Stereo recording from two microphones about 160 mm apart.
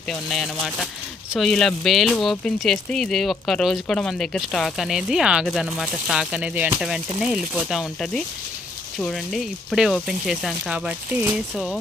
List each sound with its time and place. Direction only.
0.1 s speech: centre (ahead or behind)